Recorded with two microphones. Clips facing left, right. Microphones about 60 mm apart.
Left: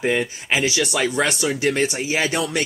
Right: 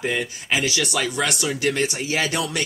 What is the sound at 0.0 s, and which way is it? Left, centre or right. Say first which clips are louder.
Speech: left 4 dB; left.